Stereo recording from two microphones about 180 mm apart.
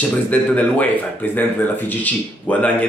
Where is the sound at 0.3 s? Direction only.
10° left (ahead or behind).